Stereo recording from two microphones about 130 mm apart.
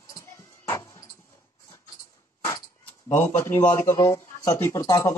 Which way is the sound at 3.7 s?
25° left (ahead or behind).